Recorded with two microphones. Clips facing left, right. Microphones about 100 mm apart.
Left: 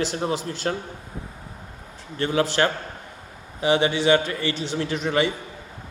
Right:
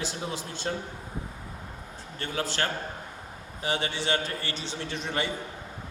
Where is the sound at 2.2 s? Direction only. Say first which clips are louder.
Left 9 dB; 85° left.